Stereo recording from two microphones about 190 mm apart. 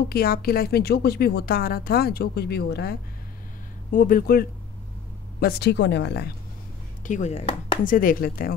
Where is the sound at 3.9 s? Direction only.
45° left (ahead or behind).